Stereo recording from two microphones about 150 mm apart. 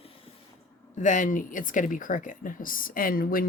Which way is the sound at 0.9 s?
55° left (ahead or behind).